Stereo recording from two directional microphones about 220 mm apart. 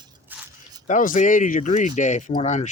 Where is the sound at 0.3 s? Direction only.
10° right (ahead or behind).